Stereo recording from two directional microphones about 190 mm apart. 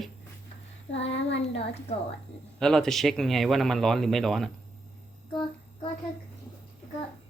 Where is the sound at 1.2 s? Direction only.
75° left (ahead or behind).